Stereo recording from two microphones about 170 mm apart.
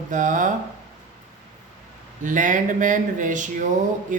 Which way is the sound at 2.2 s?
50° right (ahead or behind).